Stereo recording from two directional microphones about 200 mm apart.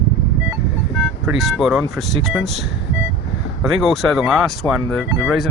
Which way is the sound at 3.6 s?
Centre (ahead or behind).